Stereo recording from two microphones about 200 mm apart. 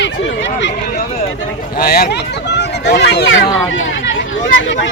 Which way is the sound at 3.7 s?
70° left (ahead or behind).